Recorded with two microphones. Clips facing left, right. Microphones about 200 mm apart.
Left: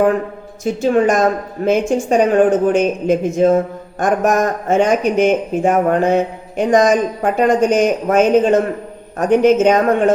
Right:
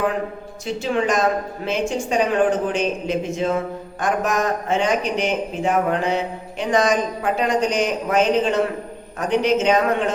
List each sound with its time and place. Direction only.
0.6 s speech: 45° left (ahead or behind)